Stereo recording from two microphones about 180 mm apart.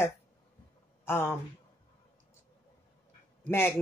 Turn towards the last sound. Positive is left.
turn(degrees=15)  # may be behind; listen again after turning